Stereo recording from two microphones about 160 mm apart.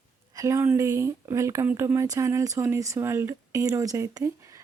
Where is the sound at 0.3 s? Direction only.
20° right (ahead or behind).